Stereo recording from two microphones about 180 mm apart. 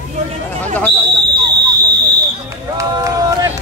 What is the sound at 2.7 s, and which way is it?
Run, 20° right (ahead or behind).